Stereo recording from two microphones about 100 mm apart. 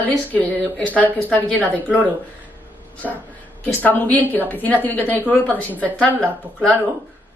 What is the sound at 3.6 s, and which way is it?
Speech, 15° left (ahead or behind).